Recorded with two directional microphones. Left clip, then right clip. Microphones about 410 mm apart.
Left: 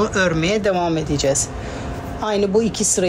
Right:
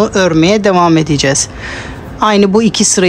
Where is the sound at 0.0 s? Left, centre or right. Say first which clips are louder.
Right 8 dB; centre.